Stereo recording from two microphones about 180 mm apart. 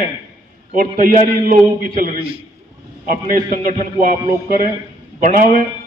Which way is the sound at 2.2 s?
30° right (ahead or behind).